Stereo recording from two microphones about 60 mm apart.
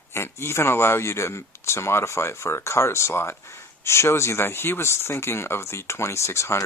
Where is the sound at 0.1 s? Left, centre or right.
Left.